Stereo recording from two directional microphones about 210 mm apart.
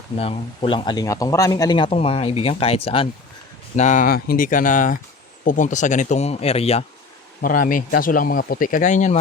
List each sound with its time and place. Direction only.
0.2 s speech: 25° left (ahead or behind)
7.4 s speech: 40° left (ahead or behind)